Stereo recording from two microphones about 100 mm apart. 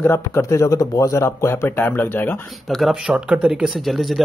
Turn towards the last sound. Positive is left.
turn(degrees=0)  # may be behind; listen again after turning